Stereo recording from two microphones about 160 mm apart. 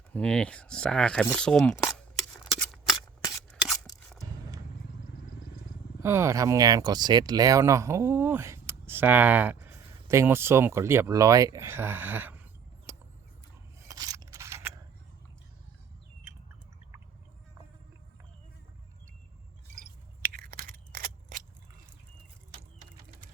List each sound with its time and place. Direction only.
0.1 s speech: 5° left (ahead or behind)
1.8 s scissors: 5° left (ahead or behind)
3.3 s shuffling cards: centre (ahead or behind)
6.0 s speech: 15° right (ahead or behind)
12.9 s a sound: 20° right (ahead or behind)
13.8 s scissors: 25° right (ahead or behind)
20.3 s a sound: 65° right (ahead or behind)